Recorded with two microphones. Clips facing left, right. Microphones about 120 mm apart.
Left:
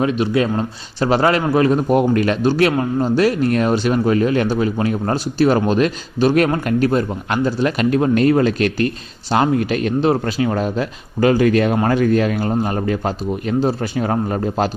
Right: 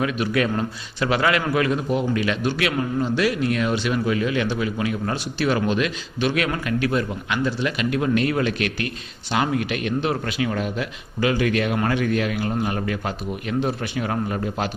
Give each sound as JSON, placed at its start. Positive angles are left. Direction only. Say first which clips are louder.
{"t": 0.0, "sound": "speech", "louder": "left 5 dB", "side_deg": 25}
{"t": 1.9, "sound": "speech", "louder": "left 7 dB", "side_deg": 50}